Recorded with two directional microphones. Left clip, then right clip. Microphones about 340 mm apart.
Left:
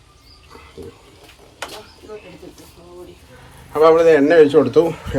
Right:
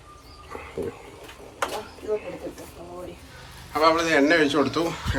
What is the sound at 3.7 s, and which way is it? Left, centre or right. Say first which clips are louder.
A man's voice: left 9 dB; centre.